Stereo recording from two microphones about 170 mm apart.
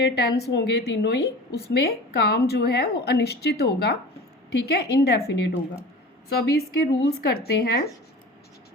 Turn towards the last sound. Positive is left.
turn(degrees=75)  # may be behind; listen again after turning